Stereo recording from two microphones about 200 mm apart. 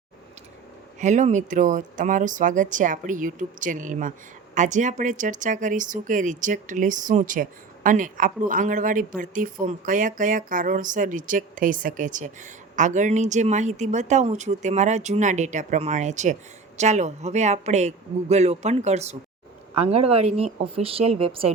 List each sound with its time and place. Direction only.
0.9 s speech: 35° right (ahead or behind)